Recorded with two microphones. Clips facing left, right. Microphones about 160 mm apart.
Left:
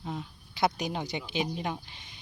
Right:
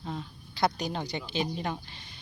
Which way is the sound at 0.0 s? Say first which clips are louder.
Even; 10° left (ahead or behind).